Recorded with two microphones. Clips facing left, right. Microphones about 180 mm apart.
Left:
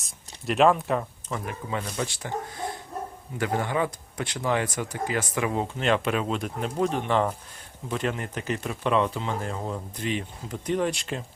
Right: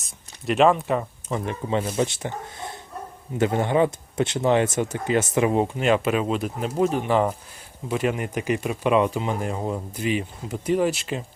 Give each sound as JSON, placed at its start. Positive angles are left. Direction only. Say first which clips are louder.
{"t": 0.0, "sound": "speech", "louder": "right 3 dB", "side_deg": 0}
{"t": 1.3, "sound": "speech", "louder": "right 7 dB", "side_deg": -25}